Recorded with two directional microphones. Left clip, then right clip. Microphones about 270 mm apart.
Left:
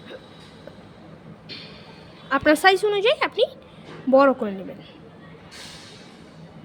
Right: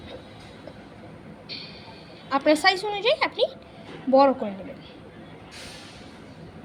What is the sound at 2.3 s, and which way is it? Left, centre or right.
A woman's voice, left.